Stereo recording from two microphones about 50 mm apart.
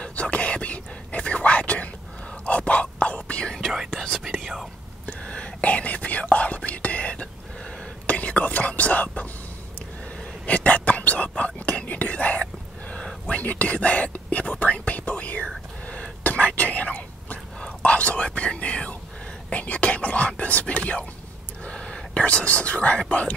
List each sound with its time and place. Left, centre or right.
0.0 s whispering: left
3.9 s whispering: centre
5.0 s whispering: left
10.4 s whispering: left
12.9 s a sound: centre
13.4 s whispering: left